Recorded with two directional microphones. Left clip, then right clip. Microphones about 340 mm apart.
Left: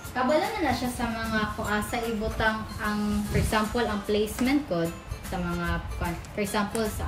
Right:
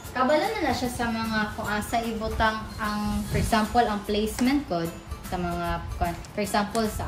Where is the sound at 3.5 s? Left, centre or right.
Centre.